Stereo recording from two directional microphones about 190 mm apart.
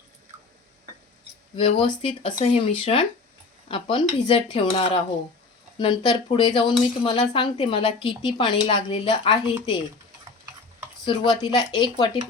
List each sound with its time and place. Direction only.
1.5 s speech: 25° left (ahead or behind)
11.0 s a woman's voice: 25° left (ahead or behind)